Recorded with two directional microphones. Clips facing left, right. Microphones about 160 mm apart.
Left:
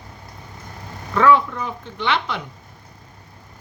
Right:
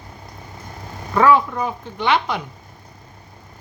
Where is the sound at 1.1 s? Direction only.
45° right (ahead or behind).